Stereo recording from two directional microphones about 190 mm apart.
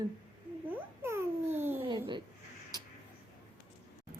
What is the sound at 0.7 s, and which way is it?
Babbling, 10° right (ahead or behind).